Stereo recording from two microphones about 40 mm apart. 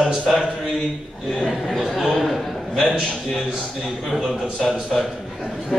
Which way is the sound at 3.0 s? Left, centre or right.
Centre.